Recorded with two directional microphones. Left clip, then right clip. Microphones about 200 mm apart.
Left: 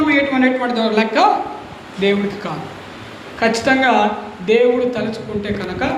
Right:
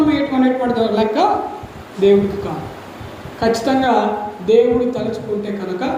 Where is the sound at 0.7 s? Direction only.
20° left (ahead or behind).